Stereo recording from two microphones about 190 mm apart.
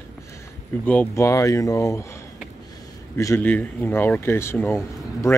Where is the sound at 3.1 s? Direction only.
15° left (ahead or behind).